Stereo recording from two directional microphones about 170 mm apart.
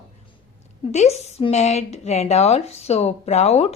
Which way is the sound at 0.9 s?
40° left (ahead or behind).